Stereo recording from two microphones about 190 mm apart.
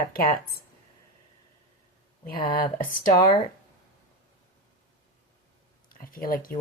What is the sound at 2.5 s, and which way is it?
Speech, 45° left (ahead or behind).